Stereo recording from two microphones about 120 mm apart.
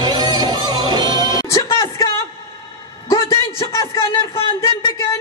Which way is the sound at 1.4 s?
30° left (ahead or behind).